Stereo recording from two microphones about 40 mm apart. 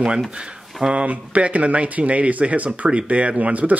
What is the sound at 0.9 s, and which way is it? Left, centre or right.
Speech, right.